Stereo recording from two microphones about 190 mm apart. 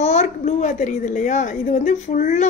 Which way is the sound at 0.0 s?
35° left (ahead or behind).